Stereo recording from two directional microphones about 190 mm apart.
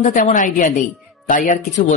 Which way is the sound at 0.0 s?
40° left (ahead or behind).